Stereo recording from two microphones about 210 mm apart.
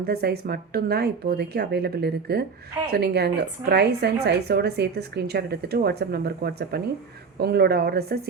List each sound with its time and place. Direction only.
0.0 s a woman's voice: 50° right (ahead or behind)